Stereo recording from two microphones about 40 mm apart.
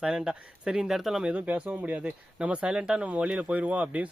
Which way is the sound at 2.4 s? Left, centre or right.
Right.